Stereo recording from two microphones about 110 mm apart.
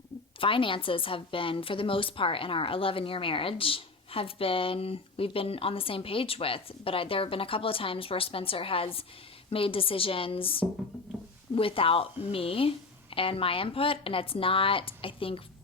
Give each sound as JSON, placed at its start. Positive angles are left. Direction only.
{"t": 0.3, "sound": "a woman's voice", "side_deg": 50}